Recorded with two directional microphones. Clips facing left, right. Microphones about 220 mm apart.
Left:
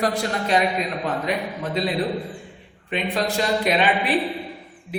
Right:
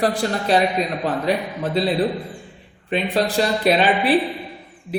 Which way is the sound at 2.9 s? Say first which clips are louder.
Right 4 dB; 35° right (ahead or behind).